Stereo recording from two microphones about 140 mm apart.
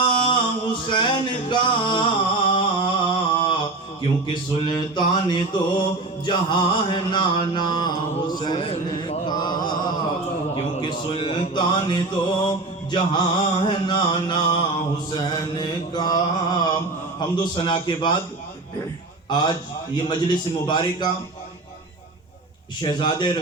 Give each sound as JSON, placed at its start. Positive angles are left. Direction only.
{"t": 0.0, "sound": "music", "side_deg": 35}
{"t": 2.5, "sound": "a sound", "side_deg": 35}
{"t": 4.6, "sound": "mantra", "side_deg": 35}
{"t": 10.8, "sound": "mantra", "side_deg": 35}
{"t": 19.3, "sound": "mantra", "side_deg": 30}
{"t": 22.8, "sound": "mantra", "side_deg": 35}